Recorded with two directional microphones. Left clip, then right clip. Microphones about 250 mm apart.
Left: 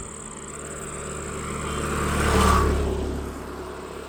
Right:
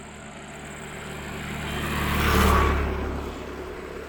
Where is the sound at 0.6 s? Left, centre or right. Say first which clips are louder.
Left 3 dB; right.